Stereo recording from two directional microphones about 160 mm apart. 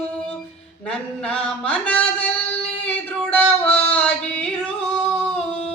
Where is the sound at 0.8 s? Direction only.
5° left (ahead or behind).